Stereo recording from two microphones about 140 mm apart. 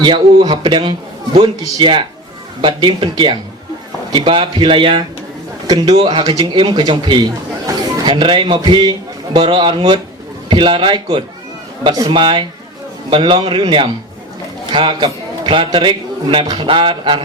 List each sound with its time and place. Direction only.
0.0 s a man's voice: 35° right (ahead or behind)